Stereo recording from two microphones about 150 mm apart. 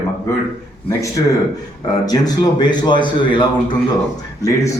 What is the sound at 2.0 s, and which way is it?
A man's voice, 25° left (ahead or behind).